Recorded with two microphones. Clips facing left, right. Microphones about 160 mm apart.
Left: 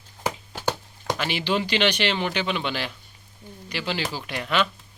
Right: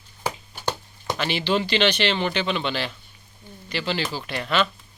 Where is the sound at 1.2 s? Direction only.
10° left (ahead or behind).